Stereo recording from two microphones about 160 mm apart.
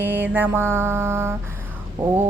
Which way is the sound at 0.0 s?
10° right (ahead or behind).